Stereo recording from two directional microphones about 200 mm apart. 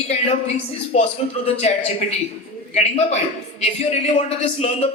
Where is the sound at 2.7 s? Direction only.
35° left (ahead or behind).